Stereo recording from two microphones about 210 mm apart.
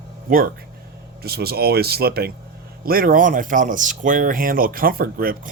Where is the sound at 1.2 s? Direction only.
50° right (ahead or behind).